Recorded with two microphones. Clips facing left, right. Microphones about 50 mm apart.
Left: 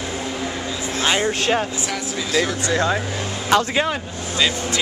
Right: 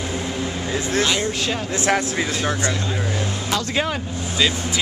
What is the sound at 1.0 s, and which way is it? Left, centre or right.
Speech, left.